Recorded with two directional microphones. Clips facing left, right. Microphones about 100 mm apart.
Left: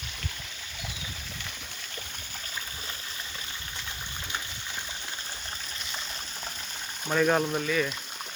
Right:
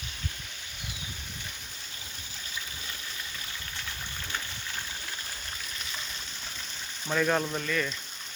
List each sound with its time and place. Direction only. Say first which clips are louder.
7.1 s speech: left 3 dB; 10° left (ahead or behind)